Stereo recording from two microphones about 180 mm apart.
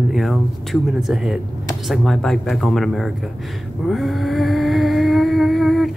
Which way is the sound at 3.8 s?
Centre (ahead or behind).